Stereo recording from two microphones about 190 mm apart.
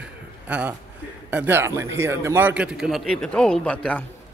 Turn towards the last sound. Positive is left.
turn(degrees=5)  # may be behind; listen again after turning